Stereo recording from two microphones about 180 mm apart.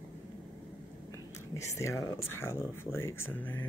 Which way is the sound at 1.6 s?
15° left (ahead or behind).